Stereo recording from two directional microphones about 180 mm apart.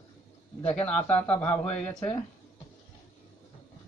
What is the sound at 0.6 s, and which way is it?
Speech, 10° left (ahead or behind).